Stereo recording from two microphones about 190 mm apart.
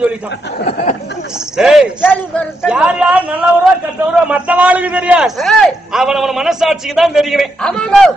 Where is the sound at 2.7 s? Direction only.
5° right (ahead or behind).